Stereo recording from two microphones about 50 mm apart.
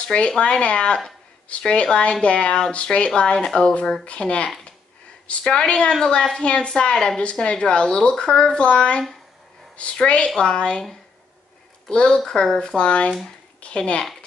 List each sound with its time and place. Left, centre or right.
0.0 s a woman's voice: left
10.0 s a woman's voice: left
11.9 s a woman's voice: centre